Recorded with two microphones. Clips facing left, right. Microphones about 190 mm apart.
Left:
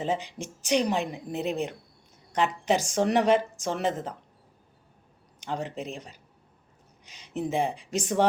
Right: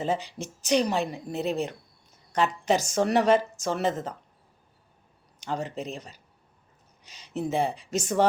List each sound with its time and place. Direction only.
0.0 s speech: 15° left (ahead or behind)
5.4 s speech: 15° left (ahead or behind)